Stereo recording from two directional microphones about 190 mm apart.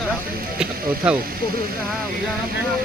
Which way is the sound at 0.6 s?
5° right (ahead or behind).